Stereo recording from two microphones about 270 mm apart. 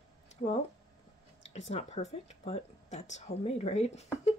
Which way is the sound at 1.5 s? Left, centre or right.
Left.